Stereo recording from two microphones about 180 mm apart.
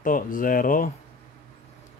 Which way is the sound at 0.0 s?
50° left (ahead or behind).